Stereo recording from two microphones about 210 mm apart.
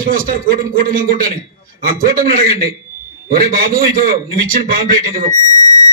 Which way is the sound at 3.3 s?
45° right (ahead or behind).